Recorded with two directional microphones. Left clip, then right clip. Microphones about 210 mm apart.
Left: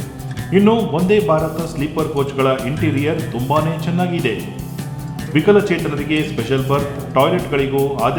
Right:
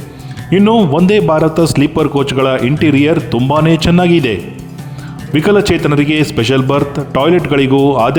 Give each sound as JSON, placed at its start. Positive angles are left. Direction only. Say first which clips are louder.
{"t": 0.5, "sound": "a man's voice", "louder": "right 5 dB", "side_deg": -45}
{"t": 5.3, "sound": "a man's voice", "louder": "right 3 dB", "side_deg": -50}